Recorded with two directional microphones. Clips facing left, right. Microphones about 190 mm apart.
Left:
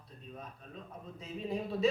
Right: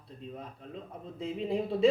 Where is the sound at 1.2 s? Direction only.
30° right (ahead or behind).